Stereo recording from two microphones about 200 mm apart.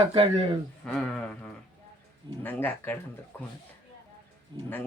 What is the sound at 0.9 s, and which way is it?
Speech, 5° left (ahead or behind).